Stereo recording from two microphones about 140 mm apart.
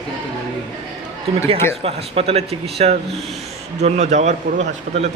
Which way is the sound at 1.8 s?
45° right (ahead or behind).